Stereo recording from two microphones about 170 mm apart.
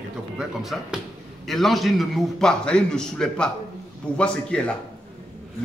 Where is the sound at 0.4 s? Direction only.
5° right (ahead or behind).